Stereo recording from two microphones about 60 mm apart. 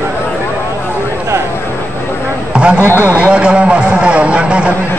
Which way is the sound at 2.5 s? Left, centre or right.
Centre.